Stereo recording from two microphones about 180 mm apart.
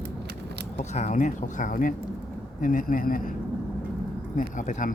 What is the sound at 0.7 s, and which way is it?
A man's voice, 40° left (ahead or behind).